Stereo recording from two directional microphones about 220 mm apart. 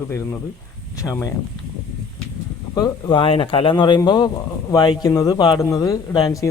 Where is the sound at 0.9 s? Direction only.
15° left (ahead or behind).